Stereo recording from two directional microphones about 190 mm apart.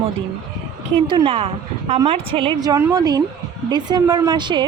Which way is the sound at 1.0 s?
25° right (ahead or behind).